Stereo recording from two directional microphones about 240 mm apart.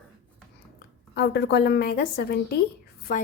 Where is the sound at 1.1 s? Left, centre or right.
Left.